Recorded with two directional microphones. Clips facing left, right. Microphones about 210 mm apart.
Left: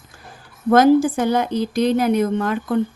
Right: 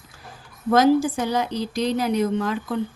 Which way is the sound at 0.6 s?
55° left (ahead or behind).